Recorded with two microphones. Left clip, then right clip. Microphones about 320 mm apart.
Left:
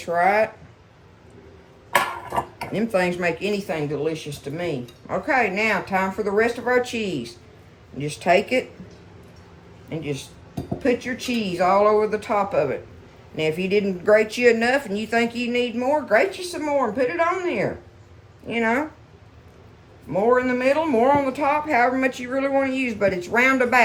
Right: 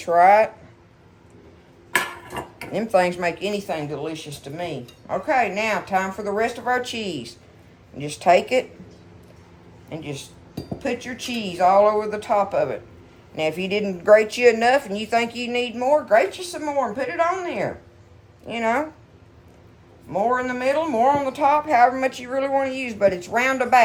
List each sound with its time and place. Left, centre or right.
0.0 s speech: centre
2.2 s dishes: centre
2.7 s speech: centre
9.9 s speech: centre
20.1 s speech: centre